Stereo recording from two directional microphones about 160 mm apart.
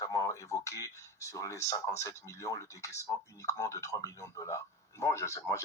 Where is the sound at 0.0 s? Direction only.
20° left (ahead or behind).